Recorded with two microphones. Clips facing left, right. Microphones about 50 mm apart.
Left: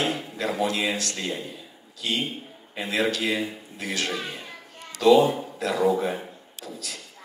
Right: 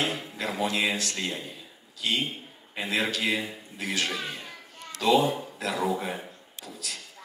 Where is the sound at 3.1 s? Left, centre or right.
Centre.